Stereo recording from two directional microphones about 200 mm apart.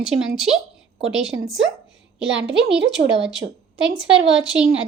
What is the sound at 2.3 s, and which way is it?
Speech, 60° right (ahead or behind).